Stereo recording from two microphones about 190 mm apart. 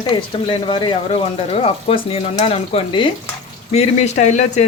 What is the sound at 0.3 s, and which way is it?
Speech, 30° left (ahead or behind).